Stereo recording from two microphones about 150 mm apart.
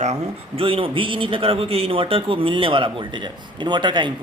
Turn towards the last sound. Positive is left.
turn(degrees=-30)  # may be behind; listen again after turning